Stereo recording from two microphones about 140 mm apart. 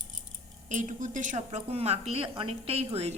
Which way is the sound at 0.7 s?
65° right (ahead or behind).